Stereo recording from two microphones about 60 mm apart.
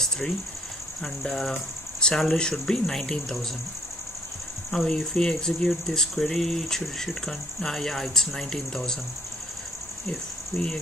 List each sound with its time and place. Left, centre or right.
1.0 s speech: centre
4.6 s speech: centre
10.0 s speech: centre